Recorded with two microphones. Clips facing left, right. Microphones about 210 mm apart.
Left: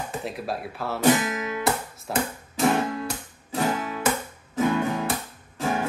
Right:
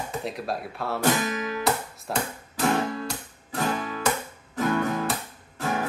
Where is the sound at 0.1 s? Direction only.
Centre (ahead or behind).